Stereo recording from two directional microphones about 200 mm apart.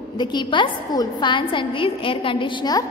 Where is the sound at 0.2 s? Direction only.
20° left (ahead or behind).